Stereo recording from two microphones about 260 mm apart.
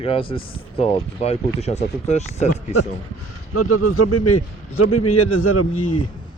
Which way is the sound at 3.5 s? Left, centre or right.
Left.